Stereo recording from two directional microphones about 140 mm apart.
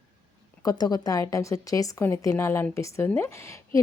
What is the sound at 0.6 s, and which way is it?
A woman's voice, 30° left (ahead or behind).